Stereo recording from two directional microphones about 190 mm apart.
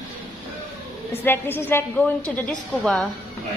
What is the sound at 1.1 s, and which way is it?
A woman's voice, 10° left (ahead or behind).